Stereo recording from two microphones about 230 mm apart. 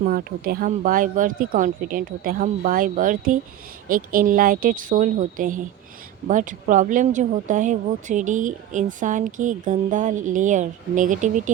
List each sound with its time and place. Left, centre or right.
0.0 s speech: right